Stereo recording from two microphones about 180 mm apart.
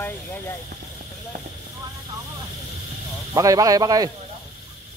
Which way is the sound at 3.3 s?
20° right (ahead or behind).